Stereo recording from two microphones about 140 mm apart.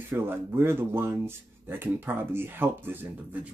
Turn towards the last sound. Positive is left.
turn(degrees=-10)  # may be behind; listen again after turning